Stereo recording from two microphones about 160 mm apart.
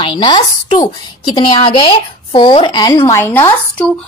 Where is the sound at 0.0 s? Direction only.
30° left (ahead or behind).